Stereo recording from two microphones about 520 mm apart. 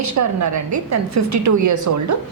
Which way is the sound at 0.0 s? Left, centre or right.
Right.